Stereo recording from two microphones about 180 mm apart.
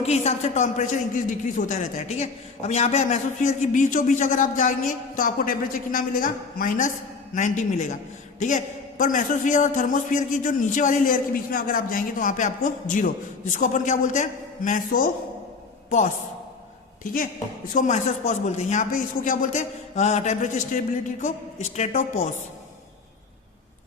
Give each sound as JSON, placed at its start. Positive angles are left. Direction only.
{"t": 0.0, "sound": "a man's voice", "side_deg": 35}
{"t": 17.7, "sound": "a man's voice", "side_deg": 45}